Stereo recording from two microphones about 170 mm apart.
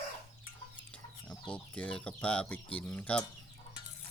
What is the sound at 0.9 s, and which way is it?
Speech, 10° left (ahead or behind).